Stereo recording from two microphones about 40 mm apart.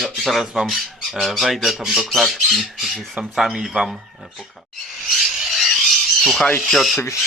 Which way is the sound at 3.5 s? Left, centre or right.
Centre.